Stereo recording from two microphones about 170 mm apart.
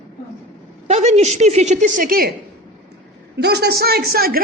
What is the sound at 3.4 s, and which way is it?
A man's voice, 75° right (ahead or behind).